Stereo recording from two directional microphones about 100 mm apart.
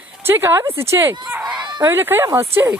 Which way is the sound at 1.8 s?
25° right (ahead or behind).